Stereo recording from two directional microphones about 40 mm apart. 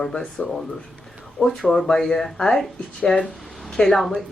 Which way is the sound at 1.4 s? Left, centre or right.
Centre.